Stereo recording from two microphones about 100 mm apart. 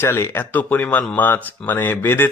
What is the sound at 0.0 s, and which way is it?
Speech, 25° left (ahead or behind).